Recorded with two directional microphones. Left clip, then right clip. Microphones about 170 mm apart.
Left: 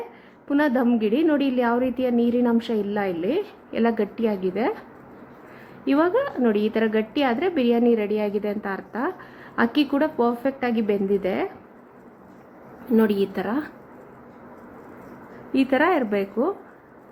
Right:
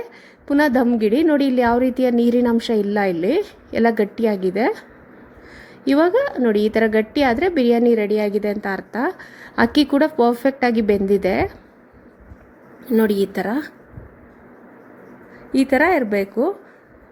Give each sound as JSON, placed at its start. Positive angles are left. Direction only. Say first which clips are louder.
{"t": 0.4, "sound": "a woman's voice", "louder": "right 5 dB", "side_deg": -40}
{"t": 5.8, "sound": "a woman's voice", "louder": "right 5 dB", "side_deg": -40}
{"t": 13.3, "sound": "a woman's voice", "louder": "right 4 dB", "side_deg": -40}
{"t": 15.5, "sound": "a woman's voice", "louder": "right 4 dB", "side_deg": -35}